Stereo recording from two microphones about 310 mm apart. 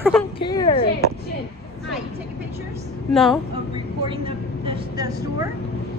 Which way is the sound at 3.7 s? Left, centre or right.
Centre.